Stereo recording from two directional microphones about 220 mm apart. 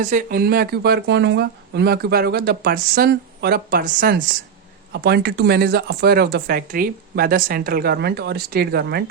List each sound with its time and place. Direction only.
0.0 s speech: 35° right (ahead or behind)